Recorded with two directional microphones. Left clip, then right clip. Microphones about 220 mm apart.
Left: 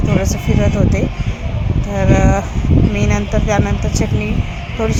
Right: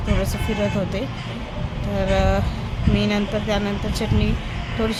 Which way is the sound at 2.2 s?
5° left (ahead or behind).